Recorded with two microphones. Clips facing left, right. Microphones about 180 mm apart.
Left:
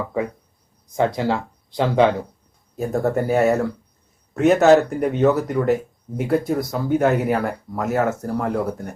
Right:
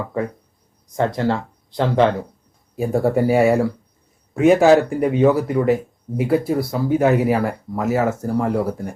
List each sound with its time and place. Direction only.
0.9 s speech: 10° left (ahead or behind)
2.7 s speech: 10° right (ahead or behind)